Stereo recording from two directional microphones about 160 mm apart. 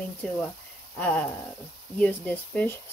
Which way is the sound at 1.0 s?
5° left (ahead or behind).